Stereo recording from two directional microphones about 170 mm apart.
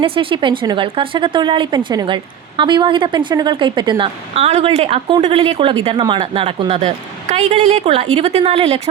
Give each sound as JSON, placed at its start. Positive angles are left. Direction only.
{"t": 0.0, "sound": "speech", "side_deg": -30}